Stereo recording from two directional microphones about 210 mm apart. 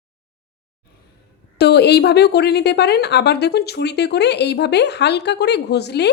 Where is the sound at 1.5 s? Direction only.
50° left (ahead or behind).